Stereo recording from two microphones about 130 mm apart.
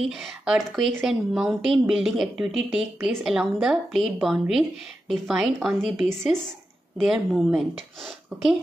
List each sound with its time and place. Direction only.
0.1 s speech: centre (ahead or behind)